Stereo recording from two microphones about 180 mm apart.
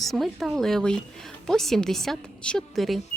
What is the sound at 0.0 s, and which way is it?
A woman's voice, centre (ahead or behind).